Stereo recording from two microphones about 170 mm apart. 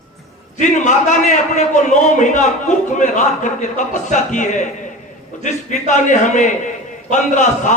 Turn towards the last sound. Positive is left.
turn(degrees=45)  # may be behind; listen again after turning